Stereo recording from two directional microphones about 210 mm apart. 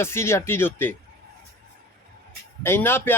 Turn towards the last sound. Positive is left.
turn(degrees=10)  # may be behind; listen again after turning